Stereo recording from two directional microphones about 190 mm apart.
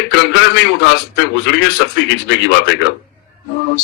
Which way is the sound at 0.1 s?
65° left (ahead or behind).